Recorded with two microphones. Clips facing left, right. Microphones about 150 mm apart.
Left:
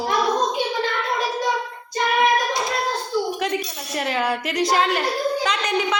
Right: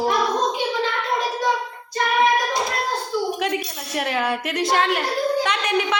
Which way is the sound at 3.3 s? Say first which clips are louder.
Even; 5° right (ahead or behind).